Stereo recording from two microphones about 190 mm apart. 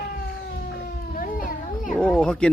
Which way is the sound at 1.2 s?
45° left (ahead or behind).